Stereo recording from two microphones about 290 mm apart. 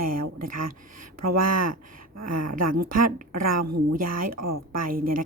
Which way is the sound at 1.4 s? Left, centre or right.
Right.